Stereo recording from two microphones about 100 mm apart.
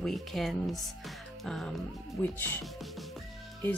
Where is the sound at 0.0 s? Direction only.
Centre (ahead or behind).